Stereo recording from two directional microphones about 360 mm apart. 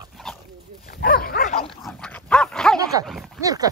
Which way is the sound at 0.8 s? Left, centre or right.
Left.